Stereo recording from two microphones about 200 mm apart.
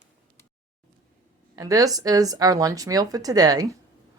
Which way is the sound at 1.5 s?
15° right (ahead or behind).